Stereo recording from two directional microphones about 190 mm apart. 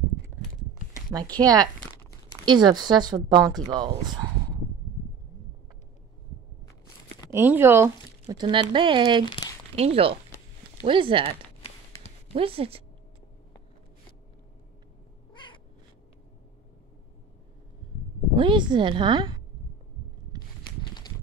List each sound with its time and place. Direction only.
1.1 s speech: 20° right (ahead or behind)
7.2 s speech: 10° right (ahead or behind)
9.2 s speech: 25° left (ahead or behind)
9.8 s speech: 30° right (ahead or behind)
11.6 s a sound: 30° left (ahead or behind)
12.4 s speech: 30° right (ahead or behind)
15.3 s cat: 25° left (ahead or behind)
18.3 s speech: 25° right (ahead or behind)